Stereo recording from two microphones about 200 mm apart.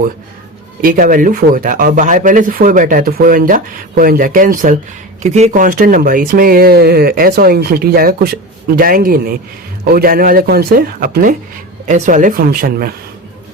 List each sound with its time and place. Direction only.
0.8 s speech: 45° right (ahead or behind)